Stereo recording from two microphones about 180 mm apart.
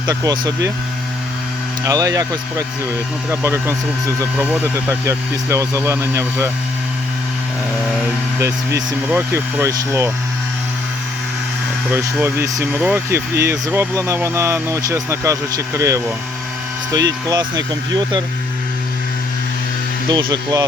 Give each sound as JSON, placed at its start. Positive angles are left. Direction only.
{"t": 0.1, "sound": "speech", "side_deg": -20}
{"t": 1.8, "sound": "speech", "side_deg": -20}
{"t": 8.4, "sound": "speech", "side_deg": -15}
{"t": 11.9, "sound": "speech", "side_deg": -10}
{"t": 20.1, "sound": "speech", "side_deg": -25}